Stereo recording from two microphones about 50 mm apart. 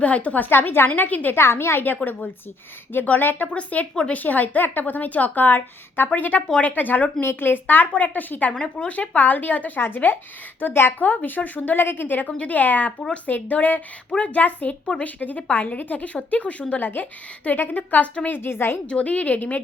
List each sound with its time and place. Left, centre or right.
0.0 s a woman's voice: left
0.4 s a woman's voice: left
1.4 s a woman's voice: left
2.9 s a woman's voice: left
3.4 s a woman's voice: left
7.2 s a woman's voice: left
8.5 s speech: centre
8.9 s a woman's voice: left
9.8 s a woman's voice: left
11.0 s a woman's voice: left
18.3 s a woman's voice: left
18.9 s a woman's voice: left